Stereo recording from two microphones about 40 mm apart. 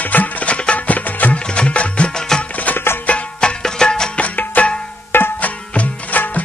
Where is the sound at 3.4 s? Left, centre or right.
Centre.